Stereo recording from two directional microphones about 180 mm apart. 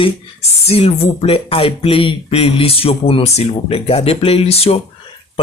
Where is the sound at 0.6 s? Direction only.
35° left (ahead or behind).